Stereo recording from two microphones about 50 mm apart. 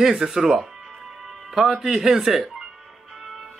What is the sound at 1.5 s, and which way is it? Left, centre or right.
Speech, centre.